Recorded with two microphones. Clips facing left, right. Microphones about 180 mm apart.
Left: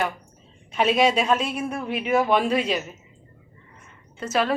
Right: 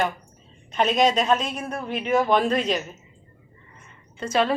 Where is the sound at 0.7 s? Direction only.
5° left (ahead or behind).